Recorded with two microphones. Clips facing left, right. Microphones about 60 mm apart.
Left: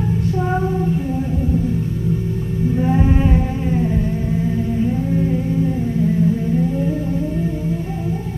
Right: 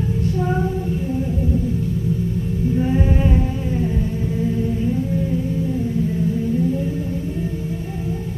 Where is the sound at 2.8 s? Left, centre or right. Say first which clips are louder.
Left 3 dB; left.